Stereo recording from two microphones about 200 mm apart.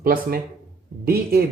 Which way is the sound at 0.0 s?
45° right (ahead or behind).